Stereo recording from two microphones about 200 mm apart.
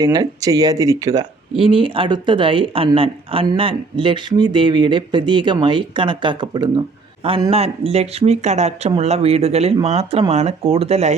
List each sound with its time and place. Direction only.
0.0 s speech: 20° right (ahead or behind)